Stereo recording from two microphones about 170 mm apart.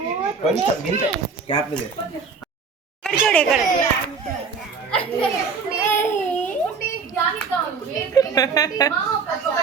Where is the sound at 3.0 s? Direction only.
5° left (ahead or behind).